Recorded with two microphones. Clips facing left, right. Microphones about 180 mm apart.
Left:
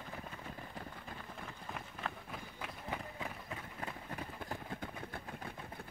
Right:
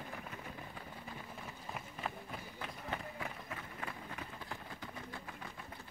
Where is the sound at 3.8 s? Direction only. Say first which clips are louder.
Left 3 dB; 40° left (ahead or behind).